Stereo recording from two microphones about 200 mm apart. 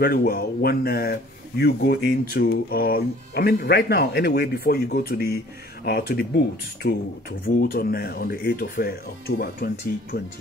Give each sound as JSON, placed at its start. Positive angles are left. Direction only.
{"t": 0.0, "sound": "speech", "side_deg": 45}
{"t": 10.1, "sound": "speech", "side_deg": 50}